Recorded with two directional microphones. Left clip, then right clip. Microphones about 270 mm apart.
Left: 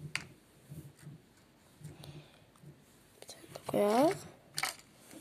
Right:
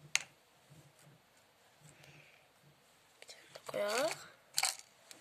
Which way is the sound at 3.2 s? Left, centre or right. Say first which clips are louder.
Left 4 dB; centre.